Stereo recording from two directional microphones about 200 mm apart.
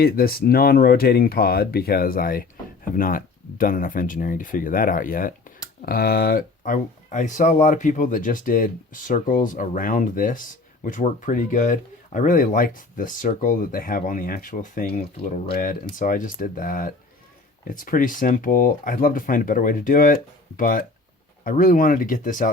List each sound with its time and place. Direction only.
0.0 s speech: 50° left (ahead or behind)